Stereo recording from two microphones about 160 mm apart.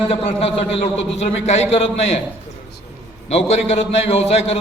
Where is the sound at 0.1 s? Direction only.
40° left (ahead or behind).